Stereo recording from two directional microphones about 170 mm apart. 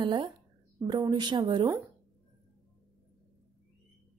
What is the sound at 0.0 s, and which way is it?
A woman's voice, 25° right (ahead or behind).